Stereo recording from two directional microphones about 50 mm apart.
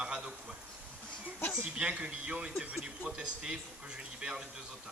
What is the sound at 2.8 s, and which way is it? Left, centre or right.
Speech, centre.